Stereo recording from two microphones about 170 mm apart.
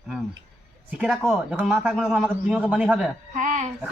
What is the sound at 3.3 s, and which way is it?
Speech, 45° right (ahead or behind).